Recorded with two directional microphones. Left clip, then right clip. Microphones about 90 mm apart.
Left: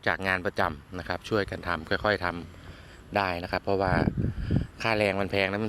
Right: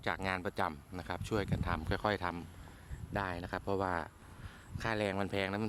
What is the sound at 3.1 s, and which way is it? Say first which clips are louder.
Speech: left 10 dB; 5° right (ahead or behind).